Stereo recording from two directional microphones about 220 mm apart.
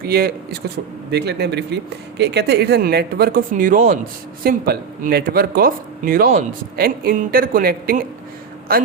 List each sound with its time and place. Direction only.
0.0 s speech: 45° right (ahead or behind)